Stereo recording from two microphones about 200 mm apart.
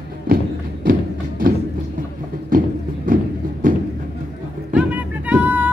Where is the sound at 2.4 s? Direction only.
45° right (ahead or behind).